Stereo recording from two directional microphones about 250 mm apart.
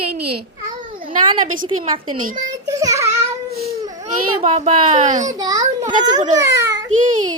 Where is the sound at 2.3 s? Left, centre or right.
Centre.